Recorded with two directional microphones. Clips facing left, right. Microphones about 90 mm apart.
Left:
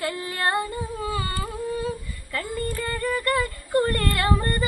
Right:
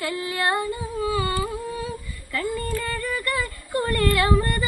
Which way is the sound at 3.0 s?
40° left (ahead or behind).